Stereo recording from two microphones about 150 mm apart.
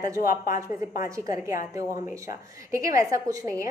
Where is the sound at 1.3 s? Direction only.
20° right (ahead or behind).